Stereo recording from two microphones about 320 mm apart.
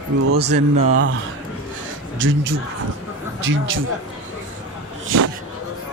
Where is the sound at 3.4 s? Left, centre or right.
Right.